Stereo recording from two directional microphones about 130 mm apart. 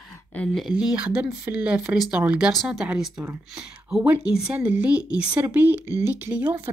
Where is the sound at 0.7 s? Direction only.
10° right (ahead or behind).